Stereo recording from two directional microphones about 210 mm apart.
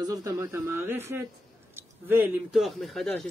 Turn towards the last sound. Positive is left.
turn(degrees=5)  # may be behind; listen again after turning